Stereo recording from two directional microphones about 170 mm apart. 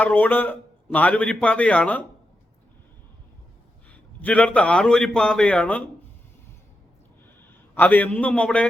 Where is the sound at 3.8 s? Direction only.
10° left (ahead or behind).